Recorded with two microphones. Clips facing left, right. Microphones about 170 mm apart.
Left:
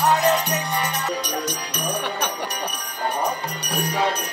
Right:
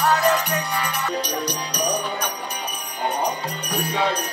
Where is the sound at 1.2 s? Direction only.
50° left (ahead or behind).